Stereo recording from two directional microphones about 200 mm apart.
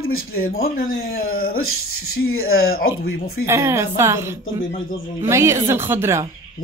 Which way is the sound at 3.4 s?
15° right (ahead or behind).